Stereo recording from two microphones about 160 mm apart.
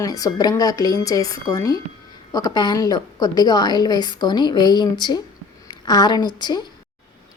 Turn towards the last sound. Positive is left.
turn(degrees=25)  # may be behind; listen again after turning